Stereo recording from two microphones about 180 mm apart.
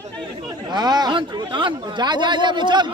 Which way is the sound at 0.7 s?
25° right (ahead or behind).